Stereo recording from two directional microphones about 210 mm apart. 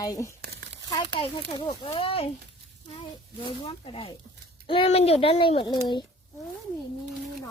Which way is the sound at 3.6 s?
25° left (ahead or behind).